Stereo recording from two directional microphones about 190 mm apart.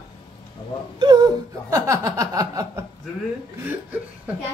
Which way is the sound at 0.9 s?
20° right (ahead or behind).